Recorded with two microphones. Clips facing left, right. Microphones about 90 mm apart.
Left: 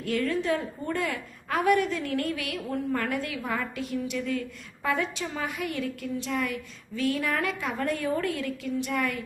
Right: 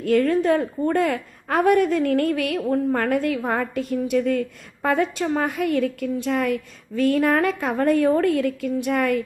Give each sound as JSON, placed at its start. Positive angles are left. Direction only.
{"t": 0.0, "sound": "a woman's voice", "side_deg": -45}